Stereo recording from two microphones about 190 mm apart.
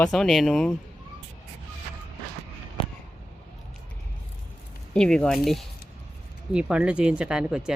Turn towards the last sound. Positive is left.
turn(degrees=-5)  # may be behind; listen again after turning